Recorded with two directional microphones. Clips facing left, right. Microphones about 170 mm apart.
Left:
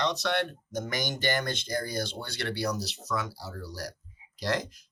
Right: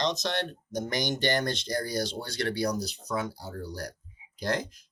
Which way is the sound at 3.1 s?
35° right (ahead or behind).